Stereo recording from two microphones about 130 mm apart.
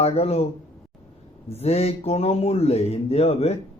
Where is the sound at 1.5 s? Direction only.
50° left (ahead or behind).